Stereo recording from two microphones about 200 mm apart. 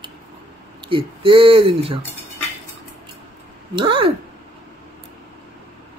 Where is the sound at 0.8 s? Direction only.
25° right (ahead or behind).